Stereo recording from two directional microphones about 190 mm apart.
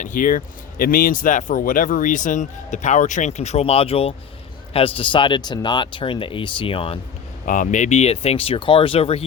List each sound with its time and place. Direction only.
0.0 s speech: 45° left (ahead or behind); by 7.0 s 30° left (ahead or behind)
7.4 s speech: 45° left (ahead or behind)